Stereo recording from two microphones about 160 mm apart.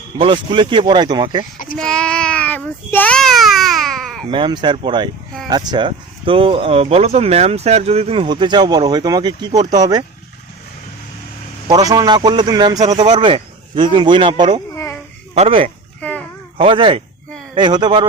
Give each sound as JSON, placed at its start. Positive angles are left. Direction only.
{"t": 0.2, "sound": "speech", "side_deg": -30}
{"t": 1.7, "sound": "speech", "side_deg": 5}
{"t": 4.3, "sound": "speech", "side_deg": -30}
{"t": 11.7, "sound": "speech", "side_deg": -20}
{"t": 13.0, "sound": "speech", "side_deg": -40}
{"t": 14.7, "sound": "a sound", "side_deg": 15}
{"t": 15.4, "sound": "speech", "side_deg": -35}
{"t": 16.0, "sound": "a sound", "side_deg": 10}
{"t": 16.6, "sound": "speech", "side_deg": -35}